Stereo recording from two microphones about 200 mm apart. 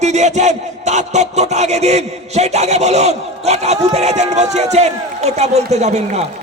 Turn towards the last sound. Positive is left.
turn(degrees=-35)  # may be behind; listen again after turning